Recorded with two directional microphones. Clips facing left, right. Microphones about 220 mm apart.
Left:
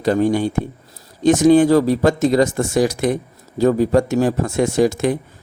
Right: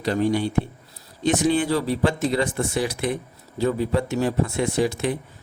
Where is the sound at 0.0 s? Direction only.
45° left (ahead or behind).